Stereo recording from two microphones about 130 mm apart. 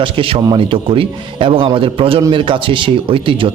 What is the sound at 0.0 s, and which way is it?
A man's voice, 40° right (ahead or behind).